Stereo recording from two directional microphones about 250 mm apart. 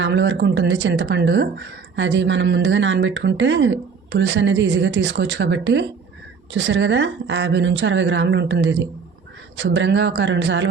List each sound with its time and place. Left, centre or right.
0.0 s speech: right